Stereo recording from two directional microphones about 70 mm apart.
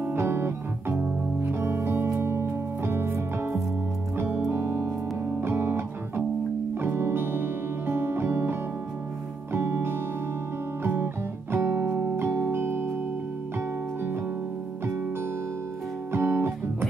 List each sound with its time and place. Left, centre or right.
0.0 s music: right
10.8 s guitar: right
11.5 s music: right
16.1 s guitar: right